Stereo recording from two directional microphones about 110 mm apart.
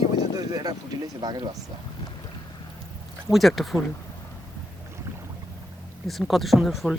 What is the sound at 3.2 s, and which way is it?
Speech, centre (ahead or behind).